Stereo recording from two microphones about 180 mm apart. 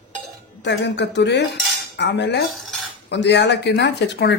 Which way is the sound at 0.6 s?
75° left (ahead or behind).